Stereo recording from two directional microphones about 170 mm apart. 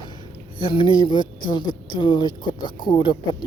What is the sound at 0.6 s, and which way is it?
Speech, 30° left (ahead or behind).